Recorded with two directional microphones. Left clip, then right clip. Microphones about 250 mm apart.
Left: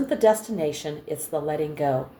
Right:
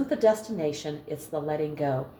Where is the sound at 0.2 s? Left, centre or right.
Left.